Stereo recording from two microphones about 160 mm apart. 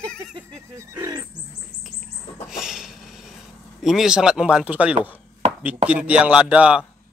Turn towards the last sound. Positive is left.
turn(degrees=-5)  # may be behind; listen again after turning